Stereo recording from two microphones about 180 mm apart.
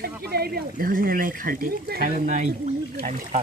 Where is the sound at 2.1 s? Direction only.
40° right (ahead or behind).